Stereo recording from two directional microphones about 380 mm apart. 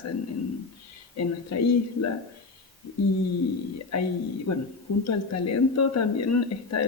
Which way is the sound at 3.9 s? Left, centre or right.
Left.